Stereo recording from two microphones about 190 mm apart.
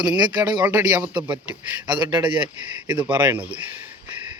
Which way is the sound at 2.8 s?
10° right (ahead or behind).